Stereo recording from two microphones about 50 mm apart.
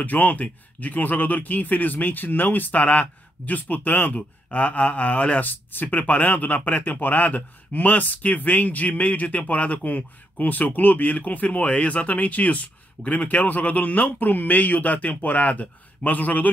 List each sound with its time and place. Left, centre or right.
0.0 s speech: left